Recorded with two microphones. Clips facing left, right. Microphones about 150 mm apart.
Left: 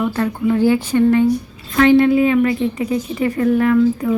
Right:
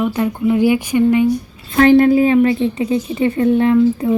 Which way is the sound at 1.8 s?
40° right (ahead or behind).